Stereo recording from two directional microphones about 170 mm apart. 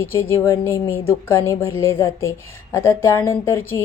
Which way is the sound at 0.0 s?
15° left (ahead or behind).